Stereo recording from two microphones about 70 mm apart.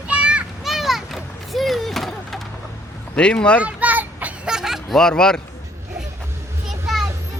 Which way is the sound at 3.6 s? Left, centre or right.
Right.